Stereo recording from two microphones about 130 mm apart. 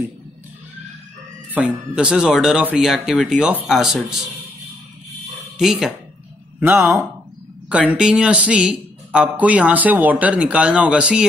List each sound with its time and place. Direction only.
1.5 s speech: 10° right (ahead or behind)
5.6 s speech: 5° right (ahead or behind)
6.6 s a man's voice: 15° right (ahead or behind)